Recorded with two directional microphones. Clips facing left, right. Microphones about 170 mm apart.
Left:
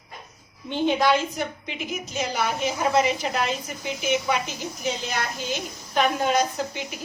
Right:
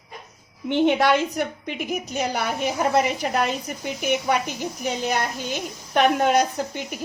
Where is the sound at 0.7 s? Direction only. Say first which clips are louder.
Right 3 dB; 65° right (ahead or behind).